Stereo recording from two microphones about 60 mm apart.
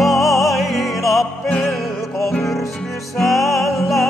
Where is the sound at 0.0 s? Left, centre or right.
Centre.